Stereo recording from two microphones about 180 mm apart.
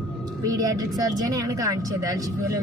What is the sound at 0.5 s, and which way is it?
A woman's voice, 20° right (ahead or behind).